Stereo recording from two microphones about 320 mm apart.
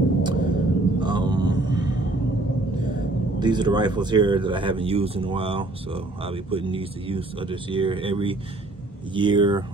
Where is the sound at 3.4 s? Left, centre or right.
Centre.